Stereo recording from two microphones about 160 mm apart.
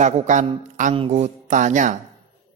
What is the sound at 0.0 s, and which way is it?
Speech, 50° right (ahead or behind).